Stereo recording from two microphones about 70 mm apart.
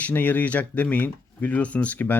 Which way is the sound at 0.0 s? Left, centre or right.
Left.